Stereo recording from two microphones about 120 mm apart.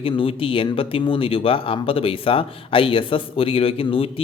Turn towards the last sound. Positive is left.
turn(degrees=50)  # may be behind; listen again after turning